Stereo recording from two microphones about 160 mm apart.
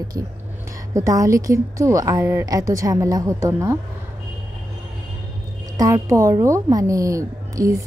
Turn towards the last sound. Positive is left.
turn(degrees=-20)  # may be behind; listen again after turning